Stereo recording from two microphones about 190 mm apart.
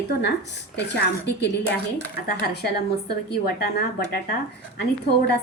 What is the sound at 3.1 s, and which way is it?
A woman's voice, 55° left (ahead or behind).